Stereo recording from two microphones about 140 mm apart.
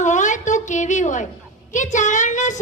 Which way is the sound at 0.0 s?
60° left (ahead or behind).